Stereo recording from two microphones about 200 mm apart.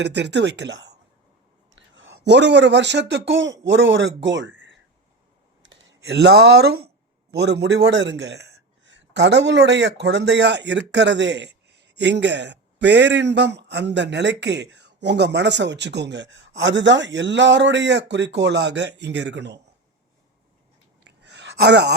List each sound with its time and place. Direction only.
0.0 s speech: 60° right (ahead or behind)
5.6 s speech: 55° right (ahead or behind)
21.2 s a sound: 60° right (ahead or behind)